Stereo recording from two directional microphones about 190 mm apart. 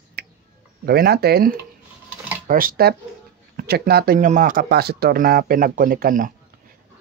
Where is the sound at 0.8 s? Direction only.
55° right (ahead or behind).